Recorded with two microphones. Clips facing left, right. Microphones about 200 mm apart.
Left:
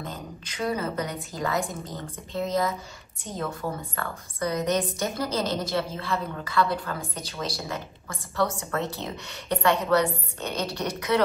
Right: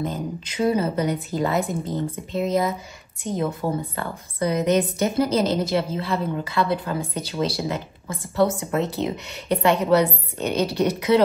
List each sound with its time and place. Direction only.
0.0 s a woman's voice: 20° right (ahead or behind)